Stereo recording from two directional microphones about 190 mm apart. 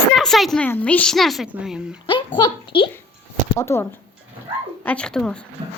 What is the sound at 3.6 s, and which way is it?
Speech, 15° left (ahead or behind).